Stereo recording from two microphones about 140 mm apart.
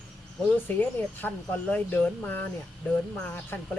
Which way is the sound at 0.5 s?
15° left (ahead or behind).